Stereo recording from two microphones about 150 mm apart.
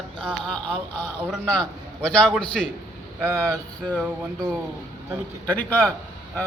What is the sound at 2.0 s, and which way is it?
Speech, 5° left (ahead or behind).